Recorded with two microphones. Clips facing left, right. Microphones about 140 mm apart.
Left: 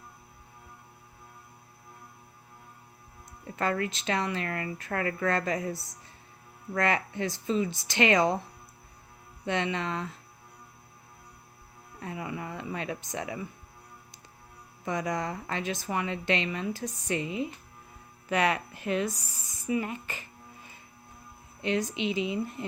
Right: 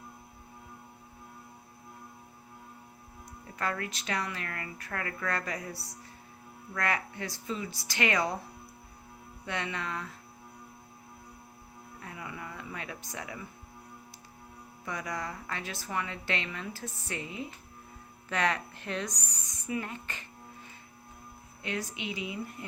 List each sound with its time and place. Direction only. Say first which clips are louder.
3.5 s a woman's voice: left 5 dB; 25° left (ahead or behind)
9.5 s a woman's voice: left 6 dB; 25° left (ahead or behind)
12.0 s a woman's voice: left 7 dB; 25° left (ahead or behind)
14.8 s a woman's voice: left 6 dB; 20° left (ahead or behind)
21.6 s a woman's voice: left 7 dB; 20° left (ahead or behind)